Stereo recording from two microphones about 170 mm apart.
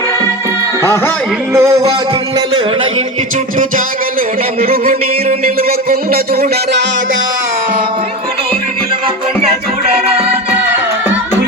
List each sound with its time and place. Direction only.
1.5 s music: 15° right (ahead or behind)
5.6 s music: 60° right (ahead or behind)